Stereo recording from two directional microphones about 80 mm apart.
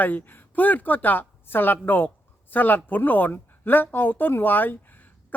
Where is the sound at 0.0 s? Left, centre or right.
Left.